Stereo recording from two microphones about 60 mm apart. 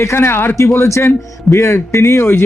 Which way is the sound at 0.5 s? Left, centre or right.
Left.